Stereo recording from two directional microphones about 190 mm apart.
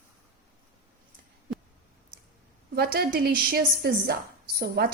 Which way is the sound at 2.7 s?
55° right (ahead or behind).